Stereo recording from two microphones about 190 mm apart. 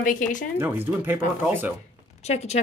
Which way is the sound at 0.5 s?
10° right (ahead or behind).